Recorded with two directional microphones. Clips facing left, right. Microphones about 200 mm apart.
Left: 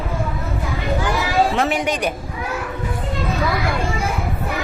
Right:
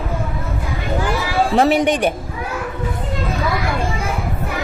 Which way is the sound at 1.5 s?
35° right (ahead or behind).